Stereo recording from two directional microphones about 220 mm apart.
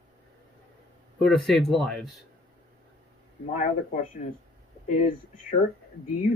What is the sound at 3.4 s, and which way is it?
Speech, 35° left (ahead or behind).